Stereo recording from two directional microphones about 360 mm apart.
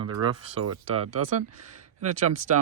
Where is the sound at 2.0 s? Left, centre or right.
Right.